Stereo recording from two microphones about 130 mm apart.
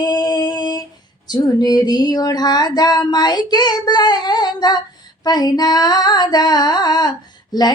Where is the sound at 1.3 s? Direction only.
30° left (ahead or behind).